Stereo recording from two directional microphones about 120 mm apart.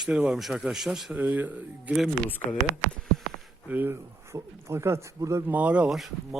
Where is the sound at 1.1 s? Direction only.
15° right (ahead or behind).